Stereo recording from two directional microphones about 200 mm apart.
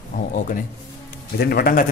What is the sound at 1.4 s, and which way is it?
Speech, 50° left (ahead or behind).